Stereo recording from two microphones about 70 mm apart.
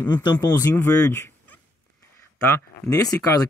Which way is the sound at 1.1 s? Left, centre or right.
Left.